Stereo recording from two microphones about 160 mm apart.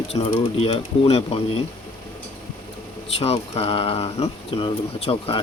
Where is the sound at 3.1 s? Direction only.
40° left (ahead or behind).